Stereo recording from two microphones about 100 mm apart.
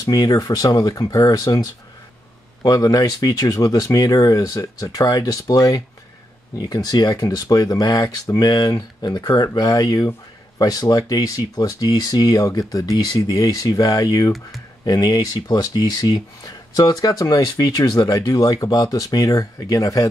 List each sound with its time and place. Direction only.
0.0 s speech: 40° left (ahead or behind)